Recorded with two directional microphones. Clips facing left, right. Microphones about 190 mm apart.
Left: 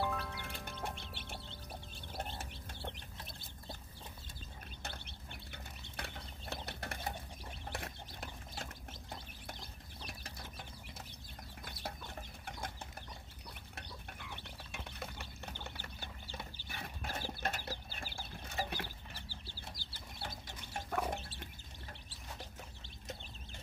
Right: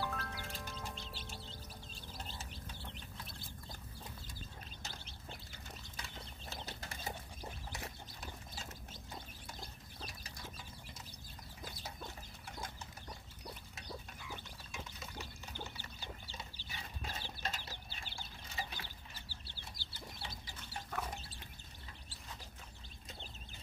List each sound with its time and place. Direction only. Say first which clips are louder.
0.0 s music: left 3 dB; 60° left (ahead or behind)
2.1 s bird: left 6 dB; 60° left (ahead or behind)
4.8 s a sound: left 3 dB; 60° left (ahead or behind)
10.0 s a sound: left 1 dB; 55° left (ahead or behind)
11.7 s chicken: left 6 dB; 60° left (ahead or behind)
13.7 s pig: right 1 dB; 60° left (ahead or behind)
17.6 s chicken: left 6 dB; 40° left (ahead or behind)
18.5 s chicken: left 6 dB; 60° left (ahead or behind)